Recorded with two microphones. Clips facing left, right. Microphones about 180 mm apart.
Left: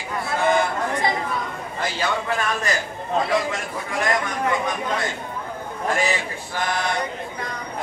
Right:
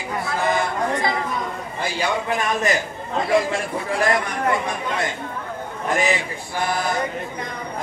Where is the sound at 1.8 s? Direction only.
15° right (ahead or behind).